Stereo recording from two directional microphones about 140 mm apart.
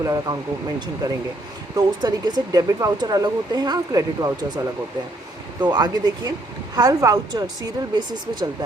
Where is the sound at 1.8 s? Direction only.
30° right (ahead or behind).